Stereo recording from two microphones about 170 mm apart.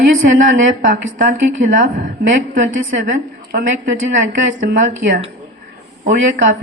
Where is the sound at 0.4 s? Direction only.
50° right (ahead or behind).